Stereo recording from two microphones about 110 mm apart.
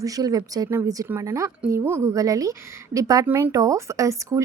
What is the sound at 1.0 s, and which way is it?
A woman's voice, 25° right (ahead or behind).